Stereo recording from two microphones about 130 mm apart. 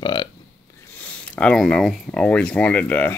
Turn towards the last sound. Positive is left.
turn(degrees=10)  # may be behind; listen again after turning